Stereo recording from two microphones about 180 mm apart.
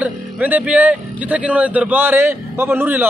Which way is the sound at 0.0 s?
10° right (ahead or behind).